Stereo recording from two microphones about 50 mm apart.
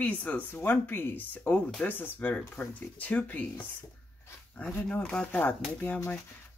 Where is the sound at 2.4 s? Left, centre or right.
Left.